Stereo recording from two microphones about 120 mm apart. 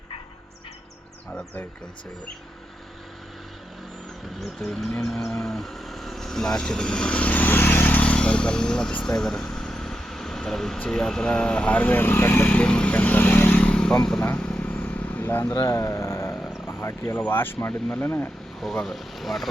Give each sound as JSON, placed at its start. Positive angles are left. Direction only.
{"t": 1.3, "sound": "speech", "side_deg": 10}
{"t": 4.4, "sound": "livestock", "side_deg": 0}
{"t": 15.4, "sound": "speech", "side_deg": 30}
{"t": 18.6, "sound": "speech", "side_deg": 0}